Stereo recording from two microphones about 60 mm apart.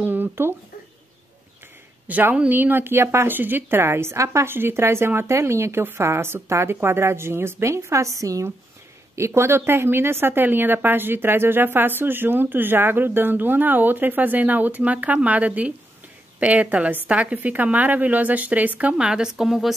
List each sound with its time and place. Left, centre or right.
0.0 s a sound: right
2.0 s a woman's voice: right
2.5 s a woman's voice: right
3.3 s speech: right
4.5 s speech: right
9.1 s a woman's voice: right; by 19.7 s centre